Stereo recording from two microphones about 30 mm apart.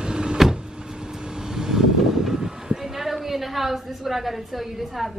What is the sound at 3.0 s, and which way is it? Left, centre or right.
A woman's voice, centre.